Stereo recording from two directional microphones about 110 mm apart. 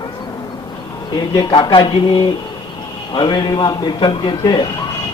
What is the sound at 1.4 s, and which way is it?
A man's voice, 45° left (ahead or behind).